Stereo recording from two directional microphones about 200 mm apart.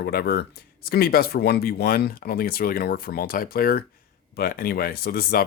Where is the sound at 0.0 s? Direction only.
50° left (ahead or behind).